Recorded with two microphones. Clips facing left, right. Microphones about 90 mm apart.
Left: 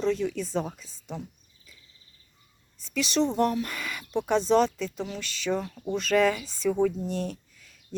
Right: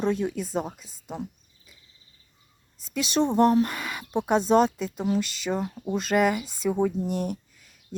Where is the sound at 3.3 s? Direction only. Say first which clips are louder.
Right 6 dB; 25° right (ahead or behind).